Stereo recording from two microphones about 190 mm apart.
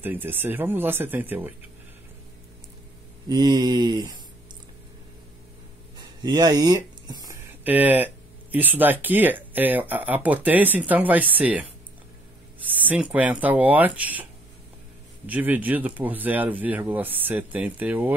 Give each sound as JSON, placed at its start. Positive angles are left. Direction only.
{"t": 0.0, "sound": "speech", "side_deg": -10}
{"t": 3.3, "sound": "mantra", "side_deg": -20}
{"t": 5.9, "sound": "a sound", "side_deg": -20}
{"t": 7.6, "sound": "speech", "side_deg": -10}
{"t": 15.2, "sound": "speech", "side_deg": -10}